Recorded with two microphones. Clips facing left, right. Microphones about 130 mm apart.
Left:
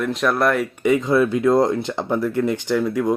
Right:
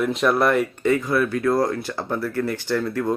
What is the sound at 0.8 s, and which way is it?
Speech, 20° left (ahead or behind).